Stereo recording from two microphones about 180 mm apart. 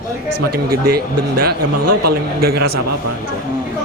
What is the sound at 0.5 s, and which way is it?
A man's voice, 60° right (ahead or behind).